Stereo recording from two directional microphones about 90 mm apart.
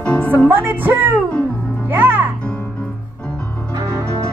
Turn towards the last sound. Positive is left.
turn(degrees=-35)  # may be behind; listen again after turning